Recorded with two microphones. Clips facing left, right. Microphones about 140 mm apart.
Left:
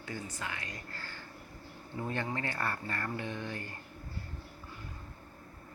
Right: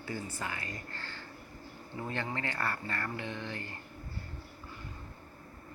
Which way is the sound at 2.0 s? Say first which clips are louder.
Left 1 dB; 15° left (ahead or behind).